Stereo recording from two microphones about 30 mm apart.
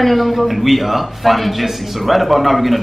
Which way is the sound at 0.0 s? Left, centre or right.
Centre.